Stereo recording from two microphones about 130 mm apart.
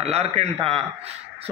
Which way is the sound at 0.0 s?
50° right (ahead or behind).